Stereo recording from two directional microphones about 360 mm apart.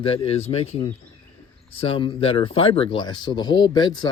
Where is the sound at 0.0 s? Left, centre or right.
Centre.